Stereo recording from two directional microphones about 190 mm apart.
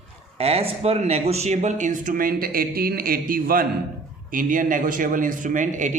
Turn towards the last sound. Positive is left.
turn(degrees=-40)  # may be behind; listen again after turning